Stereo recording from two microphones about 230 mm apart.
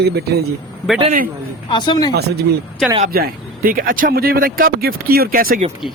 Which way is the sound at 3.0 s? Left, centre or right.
Right.